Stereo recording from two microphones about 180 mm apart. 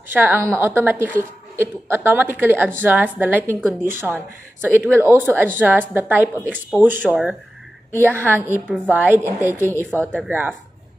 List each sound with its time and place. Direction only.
0.1 s a woman's voice: 10° right (ahead or behind)